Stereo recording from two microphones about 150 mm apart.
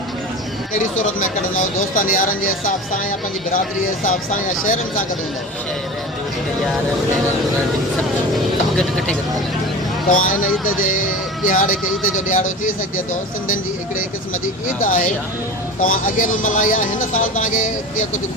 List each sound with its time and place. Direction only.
0.9 s speech: 55° left (ahead or behind)
8.8 s speech: 5° left (ahead or behind)
10.1 s speech: 65° left (ahead or behind)
14.8 s speech: 60° left (ahead or behind)